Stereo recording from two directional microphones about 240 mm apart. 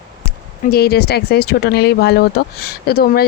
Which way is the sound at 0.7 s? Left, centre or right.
Left.